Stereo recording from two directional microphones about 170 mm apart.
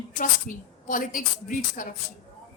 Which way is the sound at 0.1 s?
50° left (ahead or behind).